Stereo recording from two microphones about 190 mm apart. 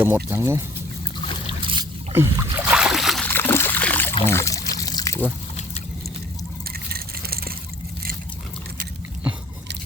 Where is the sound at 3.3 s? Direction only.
10° left (ahead or behind).